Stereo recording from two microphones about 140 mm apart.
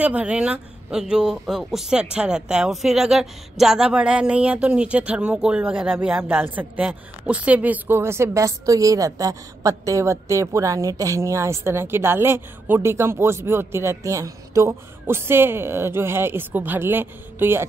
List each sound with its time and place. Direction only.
0.0 s speech: 10° right (ahead or behind)